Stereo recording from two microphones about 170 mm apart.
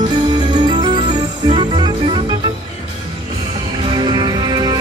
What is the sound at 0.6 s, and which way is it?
Music, 25° right (ahead or behind).